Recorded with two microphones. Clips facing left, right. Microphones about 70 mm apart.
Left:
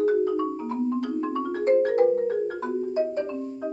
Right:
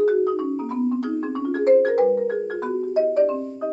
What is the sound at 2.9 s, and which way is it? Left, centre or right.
Marimba, right.